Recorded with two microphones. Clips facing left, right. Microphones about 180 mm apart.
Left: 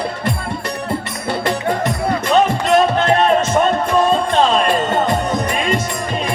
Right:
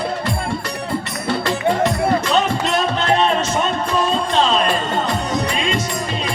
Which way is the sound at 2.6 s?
50° left (ahead or behind).